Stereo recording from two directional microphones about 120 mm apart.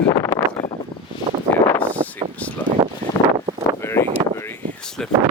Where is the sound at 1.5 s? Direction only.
15° left (ahead or behind).